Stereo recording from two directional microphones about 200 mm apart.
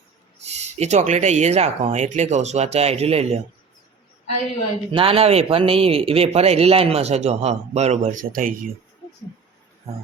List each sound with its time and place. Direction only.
0.4 s speech: 35° right (ahead or behind)
4.9 s speech: 30° right (ahead or behind); by 8.5 s 45° right (ahead or behind)
9.9 s a sound: 30° right (ahead or behind)